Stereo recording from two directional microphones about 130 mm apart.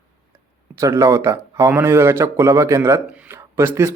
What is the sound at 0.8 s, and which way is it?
A man's voice, 25° right (ahead or behind).